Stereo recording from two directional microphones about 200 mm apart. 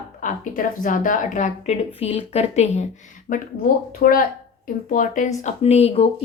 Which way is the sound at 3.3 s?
45° left (ahead or behind).